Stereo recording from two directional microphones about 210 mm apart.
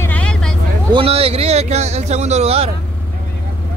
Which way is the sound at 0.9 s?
25° right (ahead or behind).